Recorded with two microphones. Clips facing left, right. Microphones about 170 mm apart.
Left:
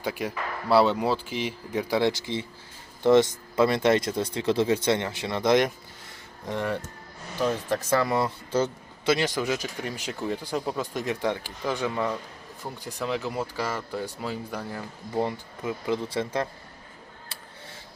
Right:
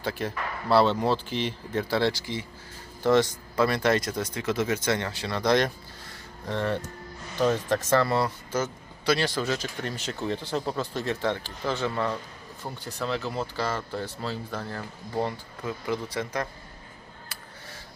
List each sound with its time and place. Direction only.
0.0 s speech: 10° left (ahead or behind)
8.5 s a man's voice: 30° left (ahead or behind)
9.1 s speech: 15° left (ahead or behind)